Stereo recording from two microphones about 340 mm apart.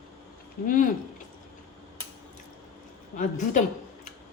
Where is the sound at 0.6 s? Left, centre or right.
Left.